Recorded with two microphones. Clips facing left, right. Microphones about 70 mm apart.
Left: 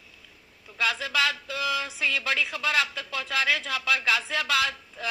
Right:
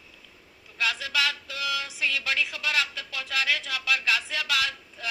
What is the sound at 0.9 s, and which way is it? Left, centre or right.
Speech, left.